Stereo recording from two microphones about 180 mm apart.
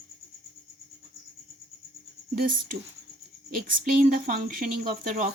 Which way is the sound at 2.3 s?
50° right (ahead or behind).